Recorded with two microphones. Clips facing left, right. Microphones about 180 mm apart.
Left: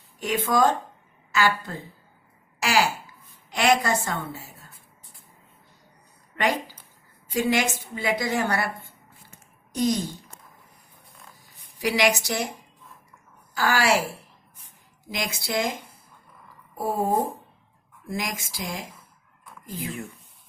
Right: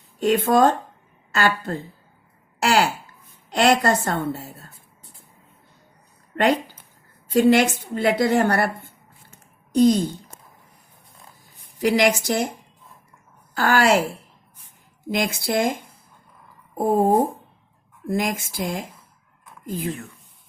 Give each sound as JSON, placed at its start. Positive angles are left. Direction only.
{"t": 0.3, "sound": "a woman's voice", "side_deg": -60}
{"t": 6.3, "sound": "a woman's voice", "side_deg": -60}
{"t": 11.8, "sound": "speech", "side_deg": -50}
{"t": 13.6, "sound": "a woman's voice", "side_deg": -55}
{"t": 15.1, "sound": "a woman's voice", "side_deg": -55}